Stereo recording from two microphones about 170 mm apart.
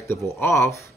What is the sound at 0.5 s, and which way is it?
Speech, centre (ahead or behind).